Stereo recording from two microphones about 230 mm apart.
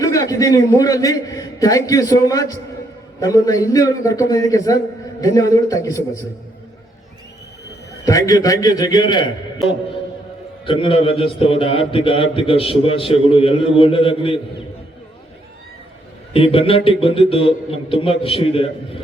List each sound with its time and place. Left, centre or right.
0.0 s a man's voice: centre
8.0 s a man's voice: centre
10.7 s a man's voice: left
16.3 s a man's voice: left